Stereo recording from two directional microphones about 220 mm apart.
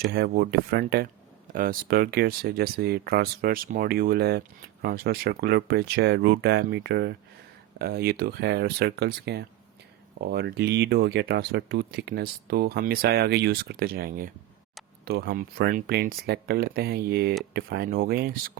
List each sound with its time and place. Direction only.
0.0 s speech: 45° right (ahead or behind)